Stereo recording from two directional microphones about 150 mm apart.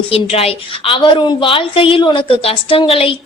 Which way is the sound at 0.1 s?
40° left (ahead or behind).